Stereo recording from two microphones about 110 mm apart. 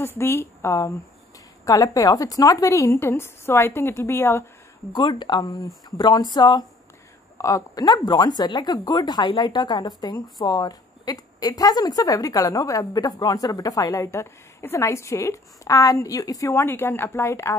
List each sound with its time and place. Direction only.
0.0 s a woman's voice: 20° left (ahead or behind)
4.9 s speech: 45° left (ahead or behind)
7.3 s speech: 30° left (ahead or behind)
16.5 s a woman's voice: 20° left (ahead or behind)